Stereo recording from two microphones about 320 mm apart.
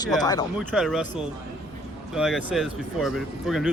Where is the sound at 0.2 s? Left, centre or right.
Centre.